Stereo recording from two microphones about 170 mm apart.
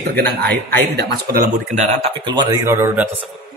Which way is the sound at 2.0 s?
25° right (ahead or behind).